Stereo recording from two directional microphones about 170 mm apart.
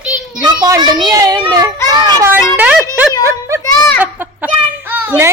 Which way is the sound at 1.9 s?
15° right (ahead or behind).